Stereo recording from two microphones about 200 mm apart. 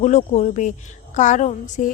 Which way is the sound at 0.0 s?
35° left (ahead or behind).